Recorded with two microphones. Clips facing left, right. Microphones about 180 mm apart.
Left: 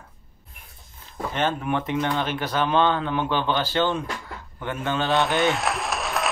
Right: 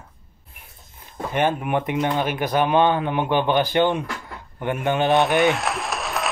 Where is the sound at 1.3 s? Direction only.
15° right (ahead or behind).